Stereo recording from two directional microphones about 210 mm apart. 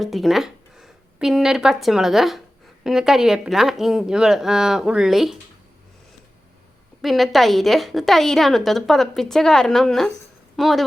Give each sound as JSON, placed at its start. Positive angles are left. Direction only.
{"t": 0.0, "sound": "a woman's voice", "side_deg": 0}
{"t": 7.0, "sound": "a woman's voice", "side_deg": 0}